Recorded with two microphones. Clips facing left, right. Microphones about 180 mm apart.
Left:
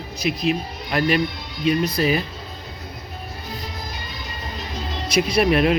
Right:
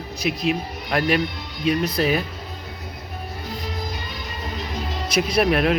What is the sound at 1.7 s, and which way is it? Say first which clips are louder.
Speech: left 1 dB; centre (ahead or behind).